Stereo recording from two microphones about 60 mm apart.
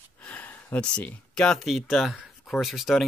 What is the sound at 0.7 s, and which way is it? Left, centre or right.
Speech, centre.